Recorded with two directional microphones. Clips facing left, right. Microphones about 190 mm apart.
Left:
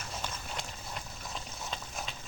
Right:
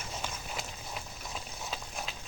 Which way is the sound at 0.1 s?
5° right (ahead or behind).